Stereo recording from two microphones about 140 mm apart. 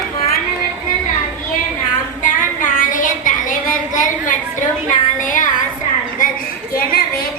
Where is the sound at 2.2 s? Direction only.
70° left (ahead or behind).